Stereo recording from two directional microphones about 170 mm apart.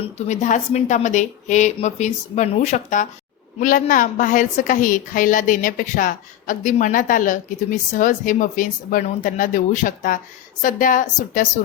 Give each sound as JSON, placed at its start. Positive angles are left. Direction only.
{"t": 0.0, "sound": "a woman's voice", "side_deg": 45}